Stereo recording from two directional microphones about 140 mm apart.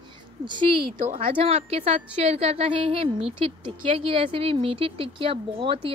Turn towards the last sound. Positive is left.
turn(degrees=-40)  # may be behind; listen again after turning